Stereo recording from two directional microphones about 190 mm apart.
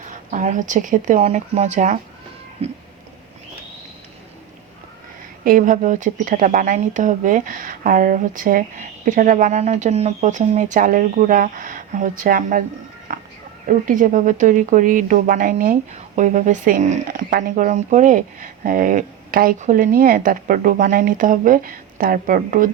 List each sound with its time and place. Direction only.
0.1 s speech: 40° right (ahead or behind)
5.5 s speech: 45° right (ahead or behind)
13.7 s speech: 45° right (ahead or behind)